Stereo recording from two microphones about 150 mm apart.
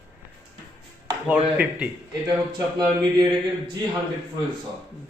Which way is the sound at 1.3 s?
10° right (ahead or behind).